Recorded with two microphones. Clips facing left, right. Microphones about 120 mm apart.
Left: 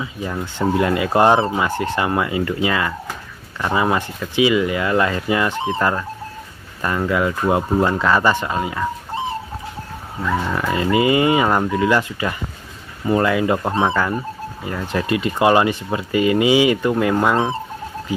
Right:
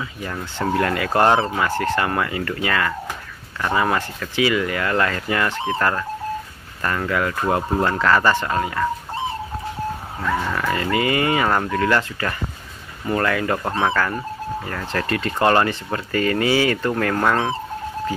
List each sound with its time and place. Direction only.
0.0 s speech: 15° left (ahead or behind)
10.4 s speech: 15° left (ahead or behind)